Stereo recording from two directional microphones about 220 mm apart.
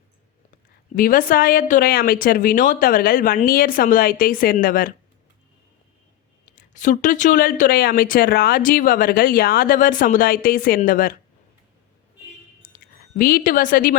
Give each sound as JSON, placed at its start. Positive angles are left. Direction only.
{"t": 0.9, "sound": "speech", "side_deg": 40}
{"t": 6.6, "sound": "speech", "side_deg": 35}
{"t": 13.1, "sound": "speech", "side_deg": 40}